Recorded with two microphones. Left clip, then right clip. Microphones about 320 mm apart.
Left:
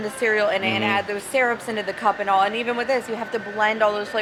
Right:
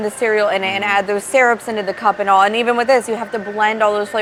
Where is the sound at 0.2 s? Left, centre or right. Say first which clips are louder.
Right 4 dB; right.